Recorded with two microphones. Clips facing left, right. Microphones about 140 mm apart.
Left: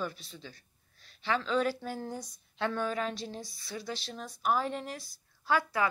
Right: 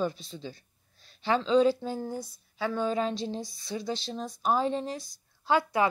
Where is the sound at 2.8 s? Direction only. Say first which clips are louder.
Right 5 dB; 25° right (ahead or behind).